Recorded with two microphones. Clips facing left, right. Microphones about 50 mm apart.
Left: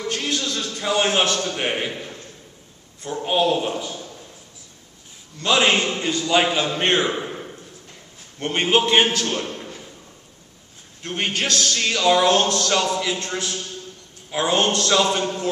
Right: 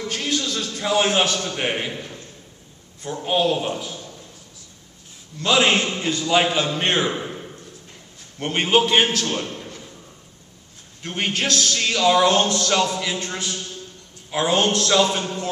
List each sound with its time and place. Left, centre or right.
0.1 s a man's voice: centre
3.1 s a man's voice: centre
5.4 s a man's voice: centre
9.6 s a sound: centre
11.0 s a man's voice: centre
15.2 s a sound: centre